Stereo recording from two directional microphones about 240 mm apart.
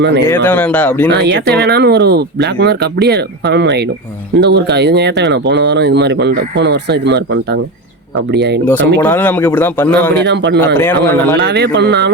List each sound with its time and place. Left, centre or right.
0.3 s speech: centre
1.2 s speech: right
8.3 s speech: right
8.6 s speech: centre
10.2 s speech: right
10.8 s speech: centre
11.3 s speech: right